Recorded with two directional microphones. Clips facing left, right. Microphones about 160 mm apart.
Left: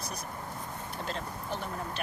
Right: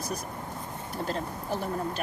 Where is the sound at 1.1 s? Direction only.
40° right (ahead or behind).